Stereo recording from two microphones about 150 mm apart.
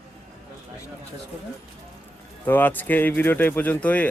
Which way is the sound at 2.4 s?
10° left (ahead or behind).